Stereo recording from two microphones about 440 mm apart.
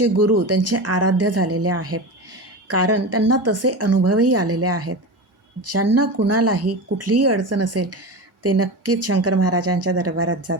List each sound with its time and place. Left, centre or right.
0.0 s speech: right